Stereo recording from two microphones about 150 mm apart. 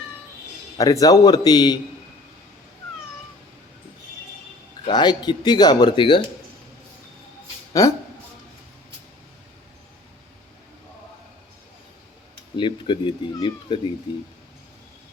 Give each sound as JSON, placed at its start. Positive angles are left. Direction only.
{"t": 0.8, "sound": "speech", "side_deg": 25}
{"t": 4.9, "sound": "speech", "side_deg": 30}
{"t": 7.7, "sound": "speech", "side_deg": 20}
{"t": 12.5, "sound": "speech", "side_deg": 35}